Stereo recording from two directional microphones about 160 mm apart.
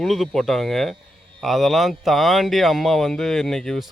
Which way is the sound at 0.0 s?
Centre (ahead or behind).